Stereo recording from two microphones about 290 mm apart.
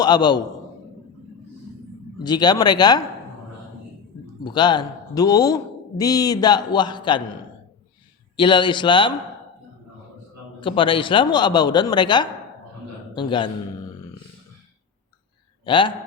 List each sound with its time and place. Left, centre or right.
0.0 s a man's voice: centre
2.2 s a man's voice: centre
4.4 s a man's voice: centre
8.4 s a man's voice: centre
10.6 s a man's voice: centre
15.6 s a man's voice: centre